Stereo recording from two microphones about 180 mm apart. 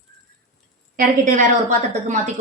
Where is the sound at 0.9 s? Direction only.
50° right (ahead or behind).